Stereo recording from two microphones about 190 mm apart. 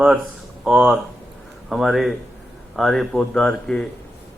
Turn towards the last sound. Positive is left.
turn(degrees=5)  # may be behind; listen again after turning